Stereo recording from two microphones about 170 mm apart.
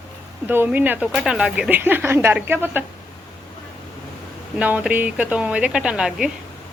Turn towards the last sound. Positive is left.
turn(degrees=-5)  # may be behind; listen again after turning